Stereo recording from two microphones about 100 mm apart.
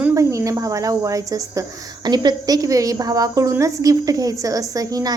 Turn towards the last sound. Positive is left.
turn(degrees=-35)  # may be behind; listen again after turning